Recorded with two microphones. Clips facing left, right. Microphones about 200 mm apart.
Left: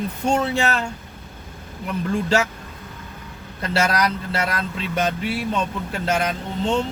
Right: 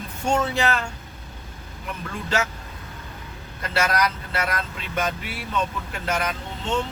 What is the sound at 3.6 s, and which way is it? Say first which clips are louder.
Speech: left 2 dB; 30° left (ahead or behind).